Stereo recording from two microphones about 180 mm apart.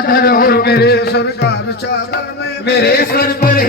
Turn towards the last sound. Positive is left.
turn(degrees=55)  # may be behind; listen again after turning